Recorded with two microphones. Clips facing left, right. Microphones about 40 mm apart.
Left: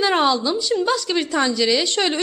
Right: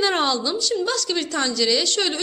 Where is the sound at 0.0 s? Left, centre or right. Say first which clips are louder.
Left 3 dB; centre.